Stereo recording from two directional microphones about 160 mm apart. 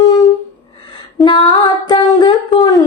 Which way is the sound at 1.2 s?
30° left (ahead or behind).